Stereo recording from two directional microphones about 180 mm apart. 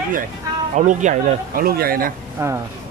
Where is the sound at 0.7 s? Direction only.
45° right (ahead or behind).